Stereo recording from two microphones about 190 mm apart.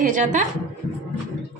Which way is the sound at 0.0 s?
40° right (ahead or behind).